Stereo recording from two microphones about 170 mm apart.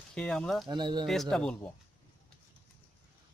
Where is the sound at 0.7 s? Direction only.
25° right (ahead or behind).